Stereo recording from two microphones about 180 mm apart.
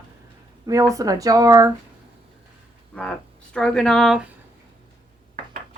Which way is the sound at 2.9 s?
5° left (ahead or behind).